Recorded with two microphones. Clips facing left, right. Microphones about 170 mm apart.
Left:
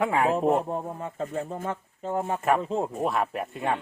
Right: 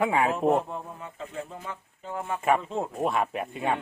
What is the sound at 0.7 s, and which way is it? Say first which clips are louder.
Speech: left 6 dB; 40° left (ahead or behind).